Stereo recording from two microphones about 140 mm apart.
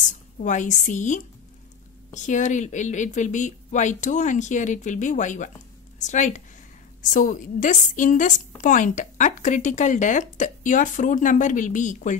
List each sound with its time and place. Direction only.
0.1 s a woman's voice: 60° left (ahead or behind)